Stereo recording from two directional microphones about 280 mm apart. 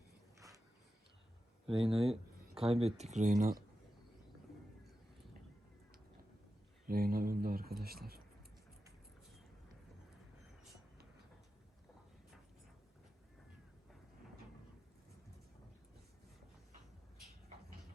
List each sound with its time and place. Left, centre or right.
0.3 s a sound: centre
1.6 s speech: centre
6.8 s speech: right